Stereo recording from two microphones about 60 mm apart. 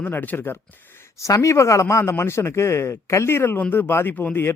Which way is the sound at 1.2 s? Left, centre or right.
Left.